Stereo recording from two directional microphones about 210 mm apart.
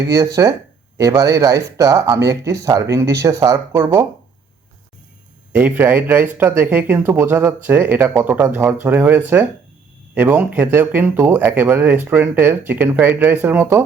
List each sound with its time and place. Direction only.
0.4 s speech: 15° right (ahead or behind)
5.5 s speech: 10° right (ahead or behind)